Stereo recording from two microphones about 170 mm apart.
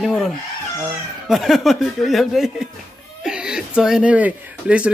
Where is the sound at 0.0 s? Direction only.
Centre (ahead or behind).